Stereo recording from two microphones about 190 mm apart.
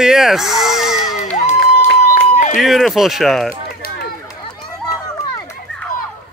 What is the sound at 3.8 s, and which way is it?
Run, 50° left (ahead or behind).